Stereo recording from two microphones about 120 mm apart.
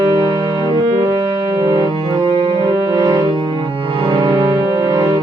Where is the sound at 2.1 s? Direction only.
40° right (ahead or behind).